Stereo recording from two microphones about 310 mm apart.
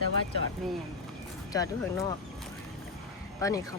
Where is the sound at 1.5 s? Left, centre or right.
Centre.